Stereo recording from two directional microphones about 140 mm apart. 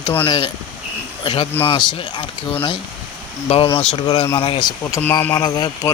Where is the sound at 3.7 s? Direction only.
35° left (ahead or behind).